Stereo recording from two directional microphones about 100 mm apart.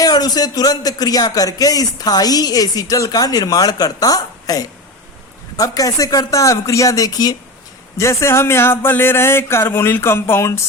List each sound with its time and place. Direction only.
0.0 s music: 40° left (ahead or behind)
7.9 s speech: 30° left (ahead or behind)